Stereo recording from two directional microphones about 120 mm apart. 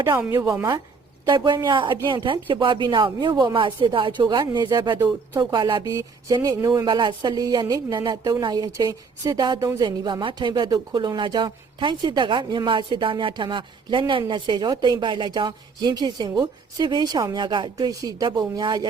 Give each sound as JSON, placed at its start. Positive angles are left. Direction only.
{"t": 0.2, "sound": "speech", "side_deg": -20}
{"t": 1.3, "sound": "a woman's voice", "side_deg": -35}
{"t": 5.8, "sound": "a woman's voice", "side_deg": -25}